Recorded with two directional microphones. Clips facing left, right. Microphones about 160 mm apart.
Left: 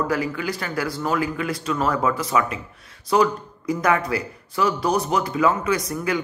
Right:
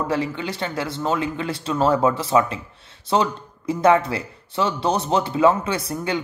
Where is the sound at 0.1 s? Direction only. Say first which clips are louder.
Even; 25° right (ahead or behind).